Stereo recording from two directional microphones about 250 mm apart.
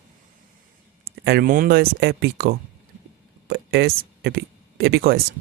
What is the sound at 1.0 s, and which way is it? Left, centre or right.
Speech, right.